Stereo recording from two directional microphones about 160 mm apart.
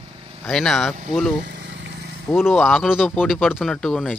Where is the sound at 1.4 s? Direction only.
90° right.